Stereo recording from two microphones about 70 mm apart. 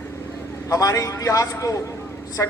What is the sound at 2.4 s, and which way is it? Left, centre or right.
Speech, left.